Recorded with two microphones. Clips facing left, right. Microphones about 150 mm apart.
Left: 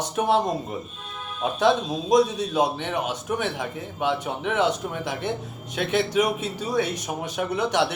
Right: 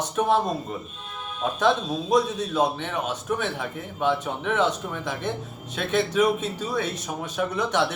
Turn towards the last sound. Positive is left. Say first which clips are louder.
# left 1 dB
turn(degrees=10)  # may be behind; listen again after turning